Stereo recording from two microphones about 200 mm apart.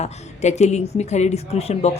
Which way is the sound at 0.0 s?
35° left (ahead or behind).